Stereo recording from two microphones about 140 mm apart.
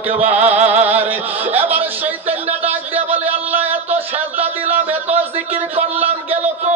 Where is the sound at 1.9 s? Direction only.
15° right (ahead or behind).